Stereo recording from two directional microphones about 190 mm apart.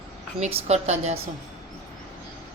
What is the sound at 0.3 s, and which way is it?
Speech, 35° right (ahead or behind).